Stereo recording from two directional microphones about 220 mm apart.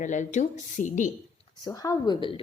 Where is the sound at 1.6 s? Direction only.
15° left (ahead or behind).